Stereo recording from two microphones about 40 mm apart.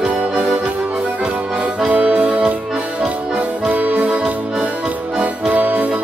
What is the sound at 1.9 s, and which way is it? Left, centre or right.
Music, right.